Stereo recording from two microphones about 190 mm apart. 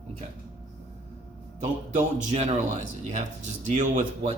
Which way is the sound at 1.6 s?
40° right (ahead or behind).